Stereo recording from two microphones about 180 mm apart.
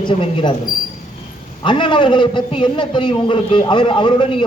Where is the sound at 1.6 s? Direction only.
25° left (ahead or behind).